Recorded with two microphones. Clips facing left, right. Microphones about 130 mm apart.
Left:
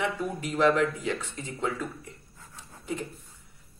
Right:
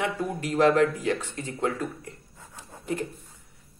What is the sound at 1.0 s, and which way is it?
Speech, 55° right (ahead or behind).